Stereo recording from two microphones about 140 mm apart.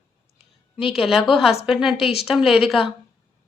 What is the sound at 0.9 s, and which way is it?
Speech, 5° right (ahead or behind).